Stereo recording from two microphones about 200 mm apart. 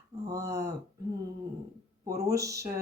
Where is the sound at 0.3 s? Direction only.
15° right (ahead or behind).